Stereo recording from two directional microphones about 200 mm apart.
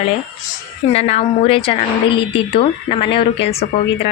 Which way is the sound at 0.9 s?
30° left (ahead or behind).